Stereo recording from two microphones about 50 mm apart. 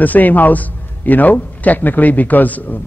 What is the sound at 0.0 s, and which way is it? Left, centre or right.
A man's voice, left.